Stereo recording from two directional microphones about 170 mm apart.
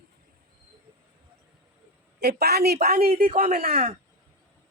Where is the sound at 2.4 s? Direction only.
70° right (ahead or behind).